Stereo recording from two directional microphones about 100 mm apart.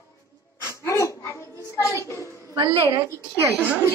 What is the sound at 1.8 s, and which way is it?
Speech, 30° left (ahead or behind).